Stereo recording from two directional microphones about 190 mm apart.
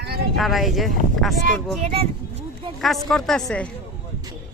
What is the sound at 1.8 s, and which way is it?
Speech, 30° right (ahead or behind).